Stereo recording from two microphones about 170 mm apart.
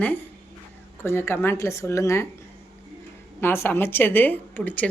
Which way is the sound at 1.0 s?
15° left (ahead or behind).